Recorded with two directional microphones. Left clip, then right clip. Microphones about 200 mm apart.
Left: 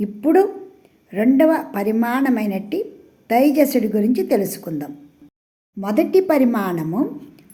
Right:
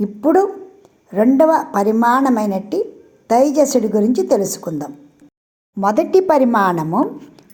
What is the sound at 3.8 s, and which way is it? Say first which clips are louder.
Speech: right 4 dB; 70° right (ahead or behind).